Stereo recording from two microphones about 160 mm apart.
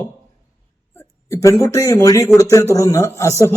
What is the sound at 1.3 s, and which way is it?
A man's voice, 20° left (ahead or behind).